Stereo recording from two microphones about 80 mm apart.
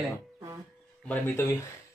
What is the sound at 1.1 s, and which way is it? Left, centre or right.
Speech, left.